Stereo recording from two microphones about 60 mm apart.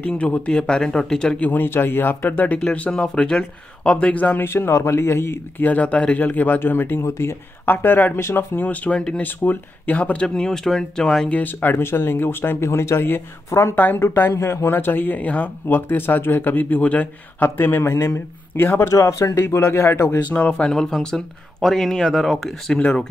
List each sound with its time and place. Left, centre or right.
0.0 s speech: centre
1.4 s speech: left
2.6 s speech: centre
4.5 s speech: left
5.6 s speech: left
7.0 s speech: left
8.2 s speech: left
8.5 s speech: left
9.9 s speech: centre
11.3 s speech: left
13.7 s speech: left
17.4 s speech: left
18.9 s speech: left
20.3 s speech: centre